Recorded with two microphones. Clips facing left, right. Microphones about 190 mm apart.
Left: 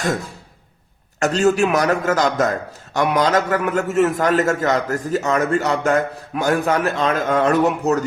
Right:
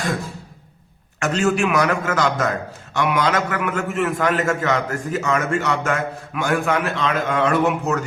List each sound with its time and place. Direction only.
1.2 s a man's voice: 35° left (ahead or behind)